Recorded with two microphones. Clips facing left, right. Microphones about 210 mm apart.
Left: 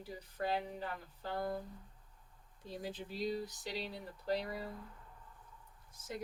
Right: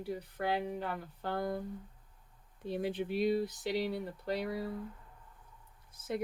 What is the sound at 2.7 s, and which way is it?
Speech, 65° right (ahead or behind).